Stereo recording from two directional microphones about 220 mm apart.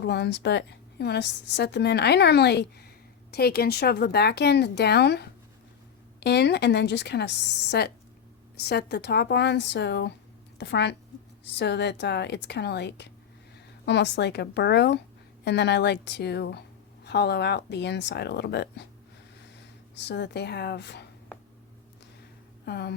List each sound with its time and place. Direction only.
0.0 s a woman's voice: 50° left (ahead or behind)
20.0 s a woman's voice: 50° left (ahead or behind)
22.6 s a sound: 50° left (ahead or behind)